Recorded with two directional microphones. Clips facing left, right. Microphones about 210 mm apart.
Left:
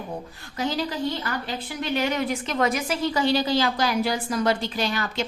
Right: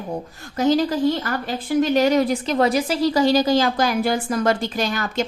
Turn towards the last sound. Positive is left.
turn(degrees=-45)  # may be behind; listen again after turning